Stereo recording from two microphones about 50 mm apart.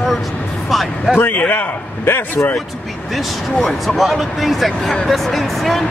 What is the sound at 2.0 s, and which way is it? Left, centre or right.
Speech, left.